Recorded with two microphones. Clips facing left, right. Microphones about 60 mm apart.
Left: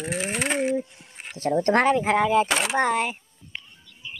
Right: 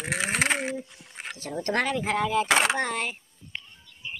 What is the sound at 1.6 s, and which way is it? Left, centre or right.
Speech, left.